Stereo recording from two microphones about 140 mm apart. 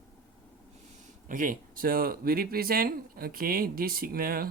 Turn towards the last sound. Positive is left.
turn(degrees=-90)